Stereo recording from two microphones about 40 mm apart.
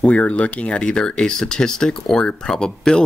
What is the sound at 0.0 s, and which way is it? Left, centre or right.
Speech, left.